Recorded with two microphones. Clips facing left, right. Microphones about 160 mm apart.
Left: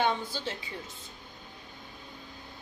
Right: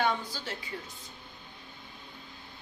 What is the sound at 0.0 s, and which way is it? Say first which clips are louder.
Speech: left 1 dB; 20° left (ahead or behind).